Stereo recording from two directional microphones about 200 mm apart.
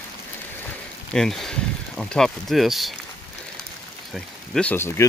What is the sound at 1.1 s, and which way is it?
Speech, centre (ahead or behind).